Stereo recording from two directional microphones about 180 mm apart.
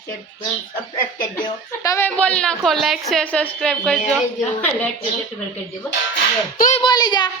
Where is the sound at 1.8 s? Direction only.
15° left (ahead or behind).